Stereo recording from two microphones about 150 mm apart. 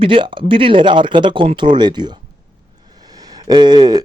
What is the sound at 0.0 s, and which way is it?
A man's voice, 35° right (ahead or behind).